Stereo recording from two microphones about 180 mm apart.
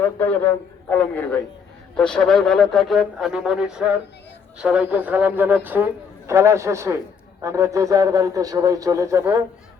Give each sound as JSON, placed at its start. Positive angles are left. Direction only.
{"t": 0.0, "sound": "a man's voice", "side_deg": 10}